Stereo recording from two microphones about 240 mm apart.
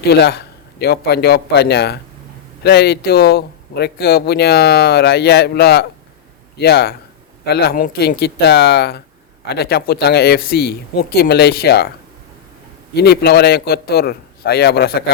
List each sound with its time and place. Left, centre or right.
0.0 s a man's voice: left
13.0 s speech: left